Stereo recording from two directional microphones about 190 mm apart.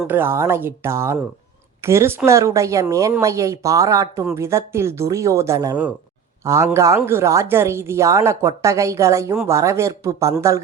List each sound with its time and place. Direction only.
0.1 s speech: 10° right (ahead or behind)